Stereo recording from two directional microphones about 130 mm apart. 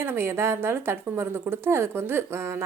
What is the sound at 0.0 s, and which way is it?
Speech, 20° right (ahead or behind).